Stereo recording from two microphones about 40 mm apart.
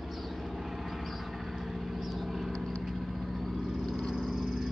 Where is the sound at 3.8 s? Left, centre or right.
Centre.